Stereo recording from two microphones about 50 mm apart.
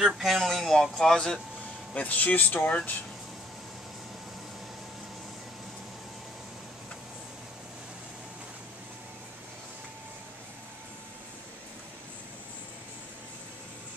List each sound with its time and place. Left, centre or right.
0.2 s speech: centre
2.0 s speech: left